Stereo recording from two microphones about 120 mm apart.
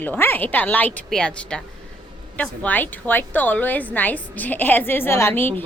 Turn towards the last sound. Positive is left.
turn(degrees=15)  # may be behind; listen again after turning